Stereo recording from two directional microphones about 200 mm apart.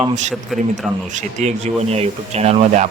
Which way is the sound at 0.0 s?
35° right (ahead or behind).